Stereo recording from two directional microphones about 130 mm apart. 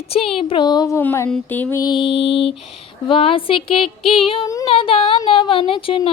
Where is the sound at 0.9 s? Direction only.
20° left (ahead or behind).